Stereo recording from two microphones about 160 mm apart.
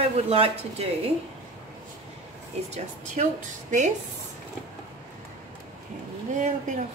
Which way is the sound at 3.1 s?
50° right (ahead or behind).